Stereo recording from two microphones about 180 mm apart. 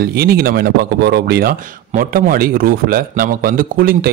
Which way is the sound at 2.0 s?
50° right (ahead or behind).